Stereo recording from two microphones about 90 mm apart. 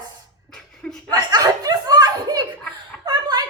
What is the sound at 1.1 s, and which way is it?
A woman's voice, 45° right (ahead or behind).